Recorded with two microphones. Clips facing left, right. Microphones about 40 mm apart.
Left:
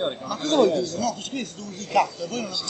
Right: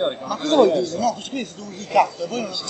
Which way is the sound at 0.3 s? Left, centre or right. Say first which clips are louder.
Right 4 dB; centre.